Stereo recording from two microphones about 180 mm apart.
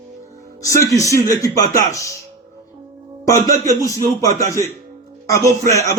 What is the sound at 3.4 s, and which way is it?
Speech, 45° right (ahead or behind).